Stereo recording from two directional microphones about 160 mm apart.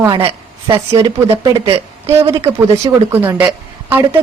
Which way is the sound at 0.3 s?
30° right (ahead or behind).